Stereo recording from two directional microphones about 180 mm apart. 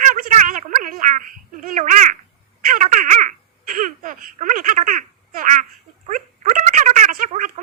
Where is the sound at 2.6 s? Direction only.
45° right (ahead or behind).